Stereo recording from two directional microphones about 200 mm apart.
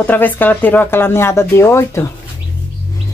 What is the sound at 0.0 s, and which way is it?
Speech, 10° left (ahead or behind).